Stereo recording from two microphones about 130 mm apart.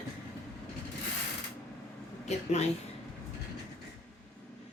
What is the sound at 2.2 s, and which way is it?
Speech, 60° left (ahead or behind).